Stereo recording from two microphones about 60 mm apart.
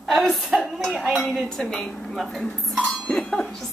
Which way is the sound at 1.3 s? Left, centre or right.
Centre.